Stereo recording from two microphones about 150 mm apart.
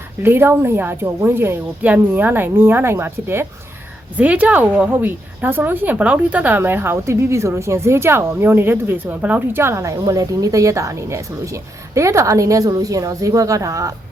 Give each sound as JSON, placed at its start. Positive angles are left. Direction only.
{"t": 0.2, "sound": "a woman's voice", "side_deg": -15}